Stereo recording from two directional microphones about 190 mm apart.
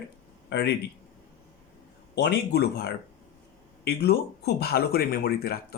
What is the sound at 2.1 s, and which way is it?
Speech, 60° left (ahead or behind).